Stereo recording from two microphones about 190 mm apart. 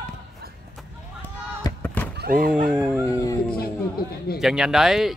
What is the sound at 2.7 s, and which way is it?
Speech, 5° right (ahead or behind).